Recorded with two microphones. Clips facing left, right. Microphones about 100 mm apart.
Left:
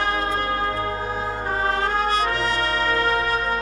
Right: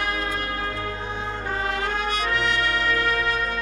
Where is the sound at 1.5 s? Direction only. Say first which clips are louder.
Left 4 dB; 35° left (ahead or behind).